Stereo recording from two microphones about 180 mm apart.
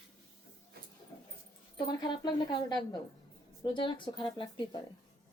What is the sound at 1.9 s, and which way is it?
A woman's voice, 25° left (ahead or behind).